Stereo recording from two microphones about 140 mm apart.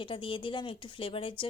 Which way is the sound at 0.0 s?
40° left (ahead or behind).